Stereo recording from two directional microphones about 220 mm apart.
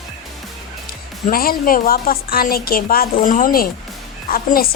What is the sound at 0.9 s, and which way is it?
A woman's voice, 40° left (ahead or behind).